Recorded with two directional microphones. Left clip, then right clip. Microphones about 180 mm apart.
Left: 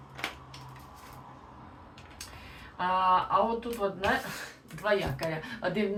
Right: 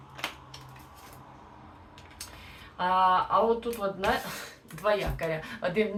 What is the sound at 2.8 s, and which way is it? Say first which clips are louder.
Speech: right 2 dB; 15° right (ahead or behind).